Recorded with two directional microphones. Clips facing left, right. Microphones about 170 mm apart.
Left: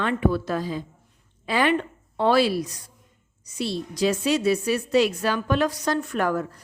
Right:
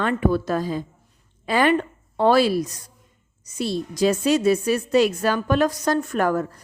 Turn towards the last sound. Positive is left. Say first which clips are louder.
# right 3 dB
turn(degrees=-45)  # may be behind; listen again after turning